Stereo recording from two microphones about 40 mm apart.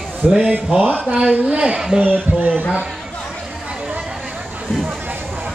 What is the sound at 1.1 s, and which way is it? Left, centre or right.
Speech, right.